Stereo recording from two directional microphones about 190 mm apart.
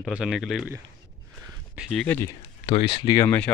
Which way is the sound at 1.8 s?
Centre (ahead or behind).